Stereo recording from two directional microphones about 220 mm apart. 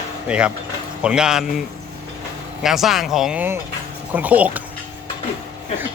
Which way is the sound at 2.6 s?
Centre (ahead or behind).